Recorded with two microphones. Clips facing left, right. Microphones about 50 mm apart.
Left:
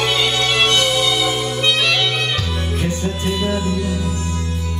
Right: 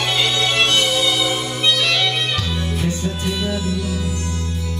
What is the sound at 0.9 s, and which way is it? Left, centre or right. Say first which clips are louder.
Music: left 1 dB; left.